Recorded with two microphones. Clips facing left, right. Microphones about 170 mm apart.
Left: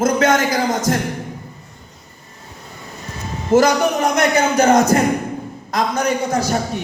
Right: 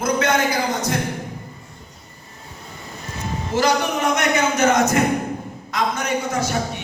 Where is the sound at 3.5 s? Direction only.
45° left (ahead or behind).